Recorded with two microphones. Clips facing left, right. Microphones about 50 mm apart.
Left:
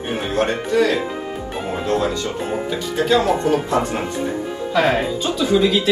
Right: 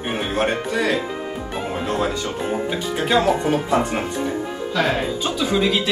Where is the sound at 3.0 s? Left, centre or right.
Right.